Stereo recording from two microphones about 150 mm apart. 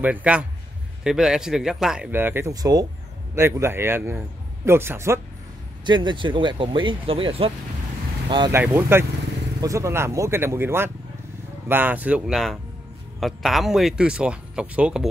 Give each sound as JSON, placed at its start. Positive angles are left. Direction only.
{"t": 0.0, "sound": "speech", "side_deg": -10}
{"t": 5.9, "sound": "speech", "side_deg": -30}
{"t": 8.5, "sound": "speech", "side_deg": -15}